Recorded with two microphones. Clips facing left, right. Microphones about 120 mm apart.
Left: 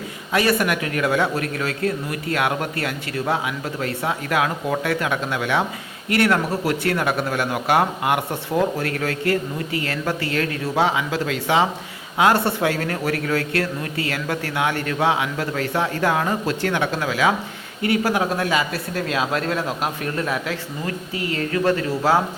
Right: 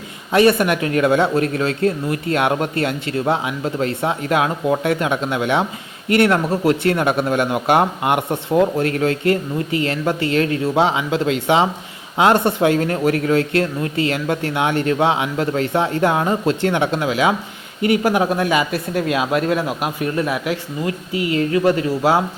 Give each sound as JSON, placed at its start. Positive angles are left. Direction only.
{"t": 0.3, "sound": "speech", "side_deg": -25}